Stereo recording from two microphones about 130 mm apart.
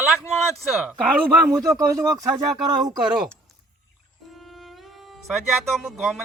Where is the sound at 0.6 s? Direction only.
5° right (ahead or behind).